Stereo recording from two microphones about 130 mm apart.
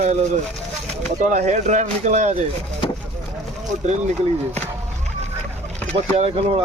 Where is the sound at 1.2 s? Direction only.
60° right (ahead or behind).